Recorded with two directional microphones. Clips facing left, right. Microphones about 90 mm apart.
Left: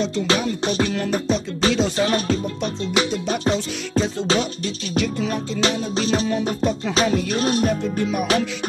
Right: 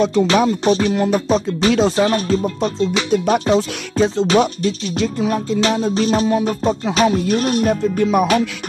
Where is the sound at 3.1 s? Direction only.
45° right (ahead or behind).